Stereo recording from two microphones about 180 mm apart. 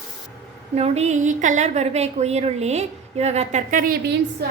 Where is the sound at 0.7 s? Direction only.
35° right (ahead or behind); by 4.5 s 55° right (ahead or behind).